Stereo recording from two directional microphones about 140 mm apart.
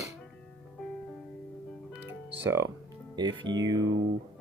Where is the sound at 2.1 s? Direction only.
20° right (ahead or behind).